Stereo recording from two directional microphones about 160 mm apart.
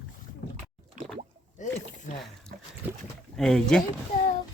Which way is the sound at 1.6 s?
50° left (ahead or behind).